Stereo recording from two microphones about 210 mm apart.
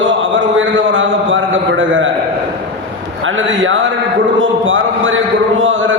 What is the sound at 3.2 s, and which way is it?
A man's voice, 65° right (ahead or behind).